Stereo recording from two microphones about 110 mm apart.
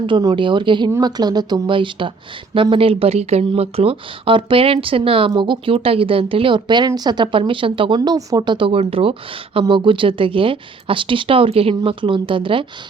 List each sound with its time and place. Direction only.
0.2 s speech: 45° right (ahead or behind)
8.5 s speech: 55° right (ahead or behind)